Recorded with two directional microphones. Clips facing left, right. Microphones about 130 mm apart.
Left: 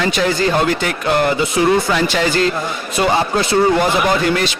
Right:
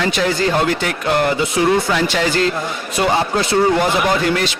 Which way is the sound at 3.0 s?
25° left (ahead or behind).